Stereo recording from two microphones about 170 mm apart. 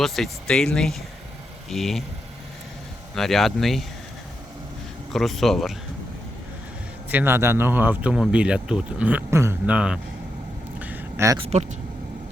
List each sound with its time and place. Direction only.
0.0 s speech: centre (ahead or behind)
3.2 s speech: centre (ahead or behind)
5.1 s speech: centre (ahead or behind)
7.1 s speech: 10° right (ahead or behind)
10.8 s a sound: 10° right (ahead or behind)
11.3 s speech: 35° right (ahead or behind)